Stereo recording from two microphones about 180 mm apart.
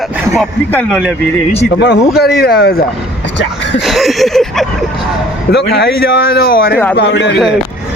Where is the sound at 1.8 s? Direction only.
70° left (ahead or behind).